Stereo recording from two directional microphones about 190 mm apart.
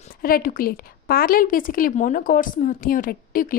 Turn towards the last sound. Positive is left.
turn(degrees=50)  # may be behind; listen again after turning